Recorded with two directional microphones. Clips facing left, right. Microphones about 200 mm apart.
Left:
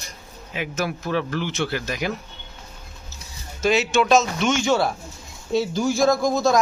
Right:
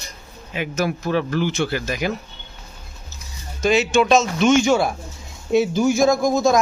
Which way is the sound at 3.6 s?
Centre (ahead or behind).